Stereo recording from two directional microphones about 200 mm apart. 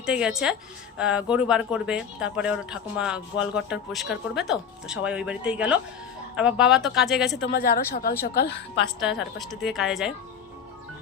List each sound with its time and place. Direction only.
0.0 s speech: 5° right (ahead or behind)
7.3 s a woman's voice: 55° left (ahead or behind)
9.0 s speech: centre (ahead or behind)